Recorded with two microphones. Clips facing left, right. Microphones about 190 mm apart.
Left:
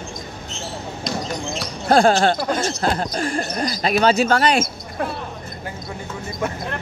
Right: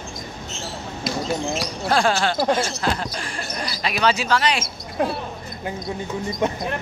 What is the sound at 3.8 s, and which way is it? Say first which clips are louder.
Speech: left 5 dB; 40° left (ahead or behind).